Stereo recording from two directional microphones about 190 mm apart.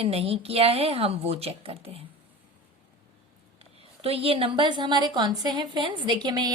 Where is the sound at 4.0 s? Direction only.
30° right (ahead or behind).